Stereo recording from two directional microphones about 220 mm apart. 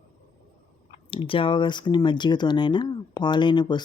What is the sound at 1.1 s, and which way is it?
Speech, 25° left (ahead or behind).